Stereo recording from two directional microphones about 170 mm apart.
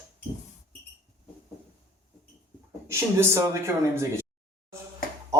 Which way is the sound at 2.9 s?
15° right (ahead or behind).